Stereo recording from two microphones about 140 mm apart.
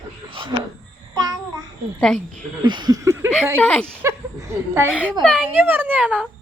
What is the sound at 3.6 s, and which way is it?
Speech, 10° left (ahead or behind).